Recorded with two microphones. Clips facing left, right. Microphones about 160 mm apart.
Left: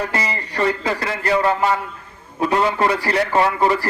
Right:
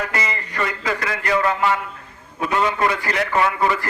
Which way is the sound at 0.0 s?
35° left (ahead or behind).